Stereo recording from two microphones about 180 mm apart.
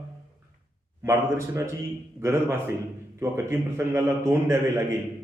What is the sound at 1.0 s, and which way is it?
A man's voice, 15° right (ahead or behind).